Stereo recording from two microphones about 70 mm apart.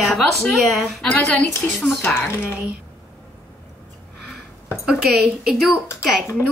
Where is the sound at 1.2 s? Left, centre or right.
Left.